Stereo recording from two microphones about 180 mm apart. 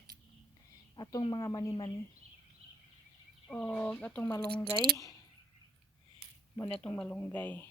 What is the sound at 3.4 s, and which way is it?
Speech, 5° left (ahead or behind).